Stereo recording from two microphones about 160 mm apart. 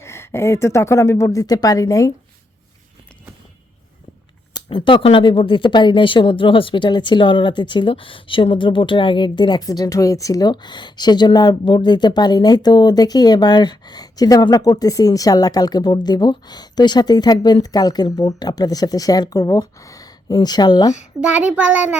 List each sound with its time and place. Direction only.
0.0 s speech: 15° left (ahead or behind)
4.5 s speech: 30° left (ahead or behind)
21.2 s a child's voice: 10° right (ahead or behind)